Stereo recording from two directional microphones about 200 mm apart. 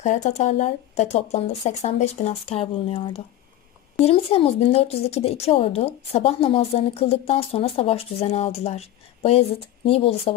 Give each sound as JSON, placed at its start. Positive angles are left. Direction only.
{"t": 0.0, "sound": "a woman's voice", "side_deg": 35}